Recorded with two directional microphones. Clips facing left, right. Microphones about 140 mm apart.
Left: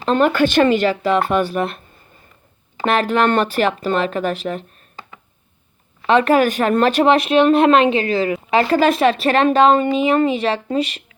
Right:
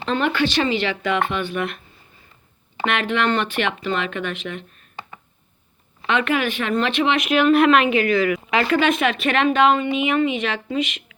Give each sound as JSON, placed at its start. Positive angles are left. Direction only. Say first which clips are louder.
{"t": 0.0, "sound": "speech", "louder": "left 6 dB", "side_deg": 40}
{"t": 2.8, "sound": "speech", "louder": "left 5 dB", "side_deg": 35}
{"t": 6.1, "sound": "speech", "louder": "left 7 dB", "side_deg": 35}